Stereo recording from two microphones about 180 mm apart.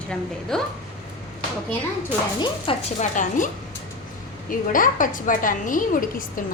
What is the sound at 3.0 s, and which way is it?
Speech, 45° left (ahead or behind).